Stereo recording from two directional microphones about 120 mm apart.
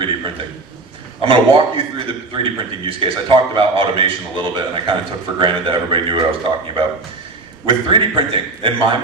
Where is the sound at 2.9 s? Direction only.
50° right (ahead or behind).